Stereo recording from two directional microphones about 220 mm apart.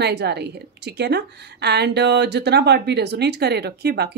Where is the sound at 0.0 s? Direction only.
50° right (ahead or behind).